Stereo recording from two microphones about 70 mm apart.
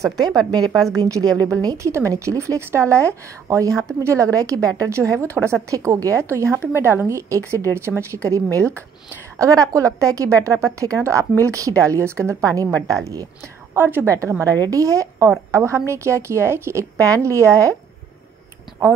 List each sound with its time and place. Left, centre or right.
0.2 s a woman's voice: right
0.7 s a woman's voice: right
1.5 s a woman's voice: right
1.9 s a woman's voice: right
9.4 s a woman's voice: right
12.4 s a woman's voice: right
13.7 s a woman's voice: right
14.0 s a woman's voice: right
17.0 s a woman's voice: right